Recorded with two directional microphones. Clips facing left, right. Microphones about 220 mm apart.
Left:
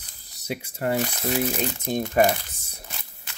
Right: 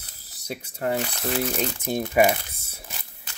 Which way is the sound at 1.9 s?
10° right (ahead or behind).